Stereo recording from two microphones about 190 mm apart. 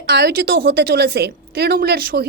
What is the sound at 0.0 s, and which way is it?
A woman's voice, 60° right (ahead or behind).